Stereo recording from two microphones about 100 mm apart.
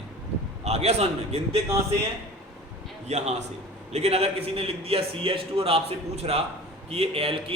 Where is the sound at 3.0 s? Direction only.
90° right.